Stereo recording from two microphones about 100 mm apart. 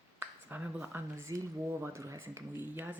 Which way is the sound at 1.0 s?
25° right (ahead or behind).